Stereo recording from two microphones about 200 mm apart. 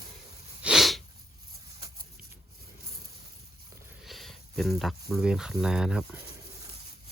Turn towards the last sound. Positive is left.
turn(degrees=-5)  # may be behind; listen again after turning